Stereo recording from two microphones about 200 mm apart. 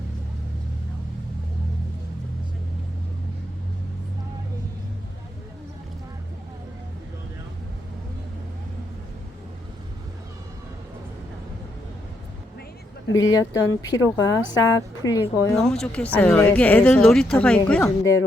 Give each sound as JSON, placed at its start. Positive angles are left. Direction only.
{"t": 13.1, "sound": "speech", "side_deg": 15}
{"t": 15.7, "sound": "speech", "side_deg": 5}
{"t": 17.8, "sound": "speech", "side_deg": 15}